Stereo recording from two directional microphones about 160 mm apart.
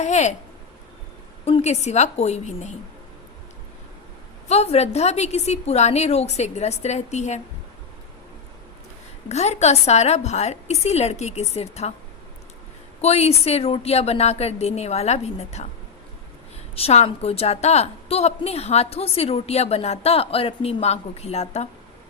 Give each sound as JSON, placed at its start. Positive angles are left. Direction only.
{"t": 0.0, "sound": "a woman's voice", "side_deg": 45}
{"t": 1.5, "sound": "a woman's voice", "side_deg": 40}
{"t": 4.4, "sound": "a woman's voice", "side_deg": 40}
{"t": 9.3, "sound": "a woman's voice", "side_deg": 45}
{"t": 13.0, "sound": "a woman's voice", "side_deg": 40}
{"t": 16.7, "sound": "a woman's voice", "side_deg": 40}